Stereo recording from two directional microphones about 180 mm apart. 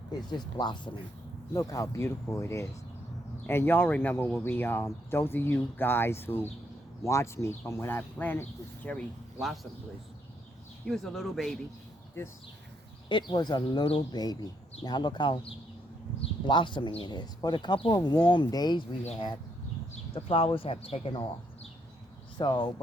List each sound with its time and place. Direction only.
0.3 s speech: 25° left (ahead or behind); by 9.6 s 5° left (ahead or behind)
10.8 s speech: centre (ahead or behind)
13.1 s speech: 25° left (ahead or behind)